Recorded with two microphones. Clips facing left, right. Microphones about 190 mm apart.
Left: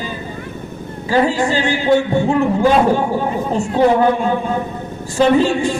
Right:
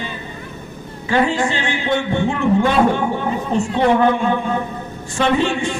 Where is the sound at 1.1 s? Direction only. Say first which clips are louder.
Left 2 dB; 35° left (ahead or behind).